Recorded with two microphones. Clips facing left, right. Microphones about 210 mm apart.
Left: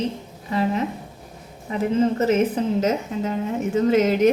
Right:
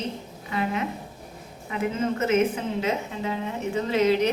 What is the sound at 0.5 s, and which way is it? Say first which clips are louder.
A woman's voice: left 5 dB; 35° left (ahead or behind).